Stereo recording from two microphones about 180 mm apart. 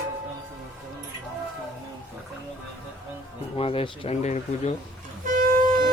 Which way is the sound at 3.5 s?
30° left (ahead or behind).